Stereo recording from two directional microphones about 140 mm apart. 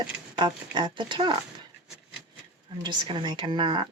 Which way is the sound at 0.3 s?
35° right (ahead or behind).